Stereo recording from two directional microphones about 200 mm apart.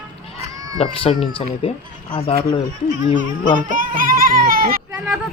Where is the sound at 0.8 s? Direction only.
30° left (ahead or behind).